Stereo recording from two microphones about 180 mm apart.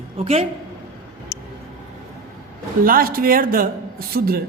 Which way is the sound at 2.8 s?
55° right (ahead or behind).